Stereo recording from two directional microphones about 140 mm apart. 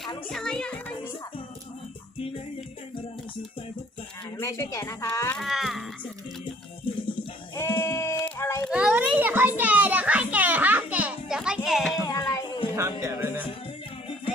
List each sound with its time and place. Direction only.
0.3 s music: 5° left (ahead or behind)
4.4 s a woman's voice: 20° left (ahead or behind)
5.4 s music: centre (ahead or behind)
7.5 s sheep: 20° left (ahead or behind)
8.2 s child singing: 20° left (ahead or behind)
8.7 s a child's voice: 10° right (ahead or behind)
9.6 s music: 10° right (ahead or behind)
12.0 s music: 25° left (ahead or behind)
13.0 s speech: 20° right (ahead or behind)